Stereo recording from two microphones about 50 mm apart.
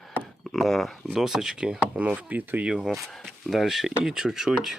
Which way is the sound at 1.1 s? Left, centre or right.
Centre.